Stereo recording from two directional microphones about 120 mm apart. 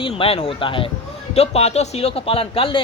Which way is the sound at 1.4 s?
60° left (ahead or behind).